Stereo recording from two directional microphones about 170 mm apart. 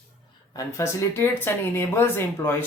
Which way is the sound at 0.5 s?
15° left (ahead or behind).